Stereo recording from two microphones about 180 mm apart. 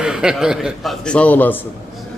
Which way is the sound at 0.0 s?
5° right (ahead or behind).